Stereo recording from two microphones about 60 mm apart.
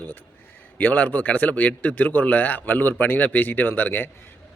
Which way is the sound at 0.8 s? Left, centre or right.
Left.